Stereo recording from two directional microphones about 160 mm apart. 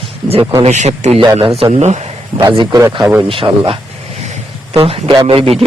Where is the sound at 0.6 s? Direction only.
45° right (ahead or behind).